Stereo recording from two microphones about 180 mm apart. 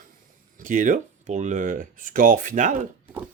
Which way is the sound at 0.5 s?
45° right (ahead or behind).